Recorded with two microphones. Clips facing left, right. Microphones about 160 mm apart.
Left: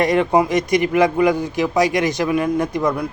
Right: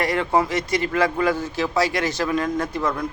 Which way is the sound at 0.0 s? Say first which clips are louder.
Left 5 dB; 20° left (ahead or behind).